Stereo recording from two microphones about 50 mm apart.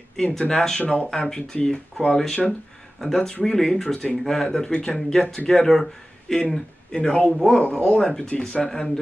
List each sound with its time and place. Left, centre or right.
0.1 s speech: centre
0.7 s speech: left; by 6.4 s centre
6.9 s speech: centre